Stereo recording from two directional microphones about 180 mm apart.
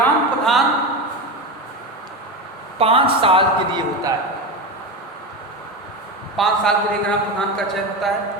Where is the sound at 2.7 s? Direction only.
30° right (ahead or behind).